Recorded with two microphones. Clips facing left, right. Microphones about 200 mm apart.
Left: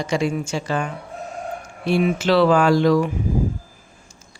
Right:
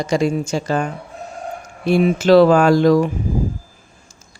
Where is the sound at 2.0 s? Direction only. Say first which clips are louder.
Right 6 dB; 40° right (ahead or behind).